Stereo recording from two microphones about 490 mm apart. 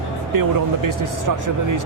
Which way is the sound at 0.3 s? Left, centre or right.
Right.